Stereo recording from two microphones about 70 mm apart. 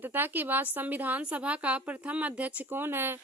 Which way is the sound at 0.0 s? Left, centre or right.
Right.